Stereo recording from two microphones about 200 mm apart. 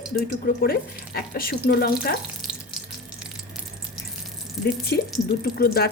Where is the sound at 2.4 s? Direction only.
Centre (ahead or behind).